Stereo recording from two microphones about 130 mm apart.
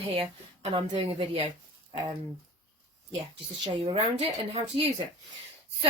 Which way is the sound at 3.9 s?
45° right (ahead or behind).